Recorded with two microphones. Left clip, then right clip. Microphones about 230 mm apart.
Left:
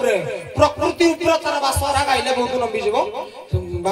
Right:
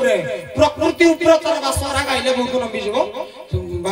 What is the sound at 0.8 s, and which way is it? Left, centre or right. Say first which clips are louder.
Music: right 4 dB; right.